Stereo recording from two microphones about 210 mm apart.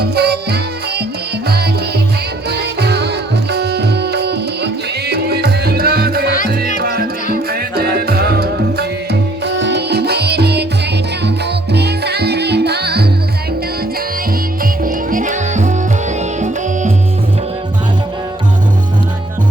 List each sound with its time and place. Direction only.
0.0 s music: 50° right (ahead or behind)
2.5 s tabla: 50° right (ahead or behind)
6.7 s music: 50° right (ahead or behind)
14.6 s music: 40° right (ahead or behind)